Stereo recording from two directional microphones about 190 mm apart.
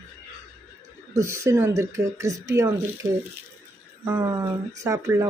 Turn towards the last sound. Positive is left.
turn(degrees=-15)  # may be behind; listen again after turning